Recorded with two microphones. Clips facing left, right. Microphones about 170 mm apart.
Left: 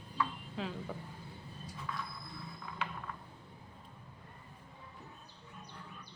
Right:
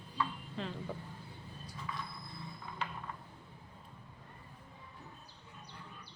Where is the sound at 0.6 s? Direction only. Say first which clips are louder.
Left 1 dB; 5° left (ahead or behind).